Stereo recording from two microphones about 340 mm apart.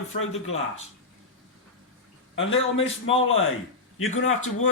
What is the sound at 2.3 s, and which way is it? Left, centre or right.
A man's voice, left.